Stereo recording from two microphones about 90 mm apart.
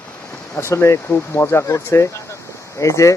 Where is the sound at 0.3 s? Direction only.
30° left (ahead or behind).